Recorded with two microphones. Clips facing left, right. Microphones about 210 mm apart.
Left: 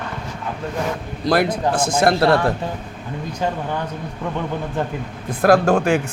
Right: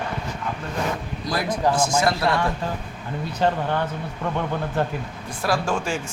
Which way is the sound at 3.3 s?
10° left (ahead or behind).